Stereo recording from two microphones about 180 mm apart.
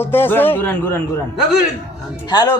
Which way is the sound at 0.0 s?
10° left (ahead or behind).